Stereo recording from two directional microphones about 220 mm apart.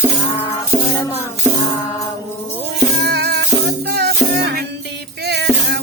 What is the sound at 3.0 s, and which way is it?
Music, 50° right (ahead or behind).